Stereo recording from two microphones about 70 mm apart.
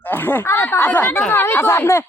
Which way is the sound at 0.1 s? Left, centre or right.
Left.